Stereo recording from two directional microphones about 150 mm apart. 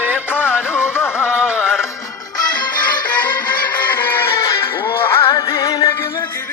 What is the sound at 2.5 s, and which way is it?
Music, 10° left (ahead or behind).